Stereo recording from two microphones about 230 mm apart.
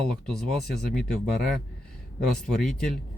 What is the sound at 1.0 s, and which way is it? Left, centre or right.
Speech, centre.